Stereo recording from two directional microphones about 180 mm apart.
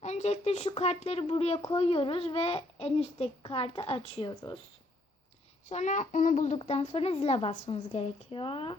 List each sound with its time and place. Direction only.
0.0 s speech: 40° left (ahead or behind)
5.6 s speech: 40° left (ahead or behind)